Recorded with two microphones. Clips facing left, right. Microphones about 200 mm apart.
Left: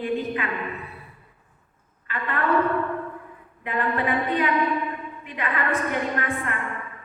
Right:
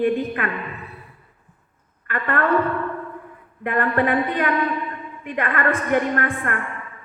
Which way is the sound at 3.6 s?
55° right (ahead or behind).